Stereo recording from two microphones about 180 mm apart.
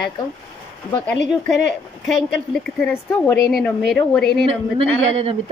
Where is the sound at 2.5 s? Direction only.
5° left (ahead or behind).